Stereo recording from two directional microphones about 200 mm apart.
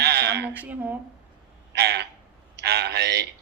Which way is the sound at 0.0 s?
55° right (ahead or behind).